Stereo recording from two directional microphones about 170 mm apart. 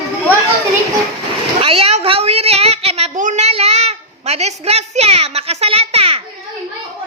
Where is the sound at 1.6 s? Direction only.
35° right (ahead or behind).